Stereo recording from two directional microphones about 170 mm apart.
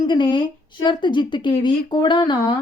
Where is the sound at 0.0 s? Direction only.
25° left (ahead or behind).